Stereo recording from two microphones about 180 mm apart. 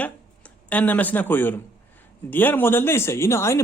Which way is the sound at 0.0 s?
10° left (ahead or behind).